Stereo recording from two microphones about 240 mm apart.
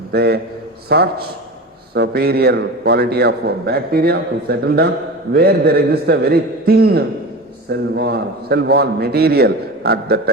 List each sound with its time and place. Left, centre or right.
0.1 s a man's voice: right